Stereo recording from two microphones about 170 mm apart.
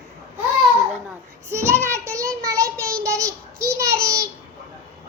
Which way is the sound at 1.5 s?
15° right (ahead or behind).